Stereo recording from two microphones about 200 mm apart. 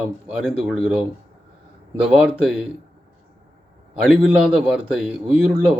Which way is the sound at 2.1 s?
5° right (ahead or behind).